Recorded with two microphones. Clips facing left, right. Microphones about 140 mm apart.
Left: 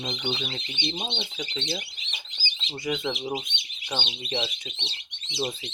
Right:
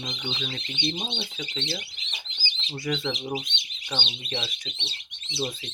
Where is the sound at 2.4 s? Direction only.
20° left (ahead or behind).